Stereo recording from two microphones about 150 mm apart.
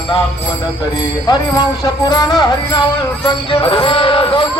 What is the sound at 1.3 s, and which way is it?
Speech, 30° left (ahead or behind).